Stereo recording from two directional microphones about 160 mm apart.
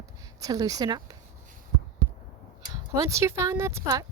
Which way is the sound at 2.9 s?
20° right (ahead or behind).